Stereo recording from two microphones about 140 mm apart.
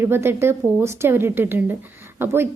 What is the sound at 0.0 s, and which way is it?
Speech, 15° right (ahead or behind).